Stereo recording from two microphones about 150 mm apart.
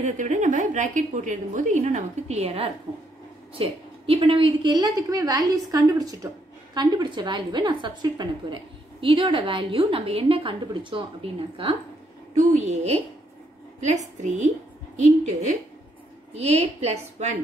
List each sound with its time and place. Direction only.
0.0 s a woman's voice: 55° right (ahead or behind); by 11.0 s 35° right (ahead or behind)
12.4 s a woman's voice: 50° right (ahead or behind)
14.2 s a woman's voice: 50° right (ahead or behind)